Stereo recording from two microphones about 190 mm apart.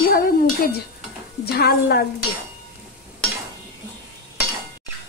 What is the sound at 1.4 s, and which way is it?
Speech, 55° left (ahead or behind).